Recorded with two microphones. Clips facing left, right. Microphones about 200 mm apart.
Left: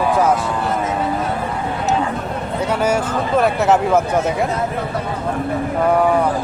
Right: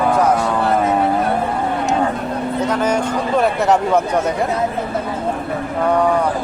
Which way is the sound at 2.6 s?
10° left (ahead or behind).